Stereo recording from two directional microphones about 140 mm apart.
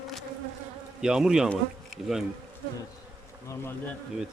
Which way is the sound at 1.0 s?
5° right (ahead or behind).